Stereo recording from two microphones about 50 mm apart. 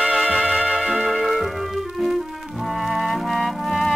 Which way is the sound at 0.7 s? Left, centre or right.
Centre.